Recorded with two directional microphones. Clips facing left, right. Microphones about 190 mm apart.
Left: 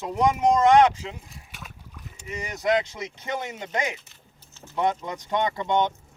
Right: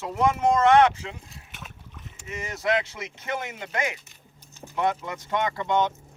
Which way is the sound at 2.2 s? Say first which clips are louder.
Left 2 dB; 15° left (ahead or behind).